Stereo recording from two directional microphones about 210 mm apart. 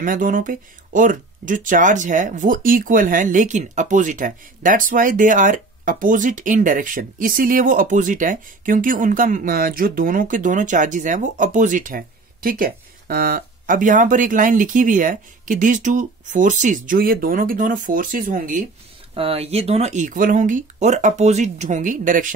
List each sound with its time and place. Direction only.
0.0 s speech: 40° right (ahead or behind)
19.1 s speech: 25° right (ahead or behind)